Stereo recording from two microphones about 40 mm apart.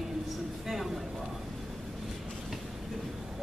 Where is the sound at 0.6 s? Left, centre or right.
Centre.